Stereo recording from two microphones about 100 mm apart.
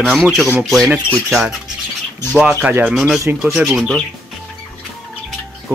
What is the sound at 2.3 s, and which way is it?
Speech, 10° right (ahead or behind).